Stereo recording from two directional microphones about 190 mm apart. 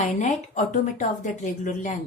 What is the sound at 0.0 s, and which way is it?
A woman's voice, 40° left (ahead or behind).